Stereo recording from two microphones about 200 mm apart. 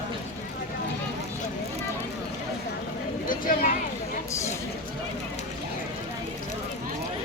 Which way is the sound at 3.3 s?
45° left (ahead or behind).